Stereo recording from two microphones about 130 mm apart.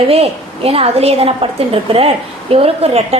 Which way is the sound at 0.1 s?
50° right (ahead or behind).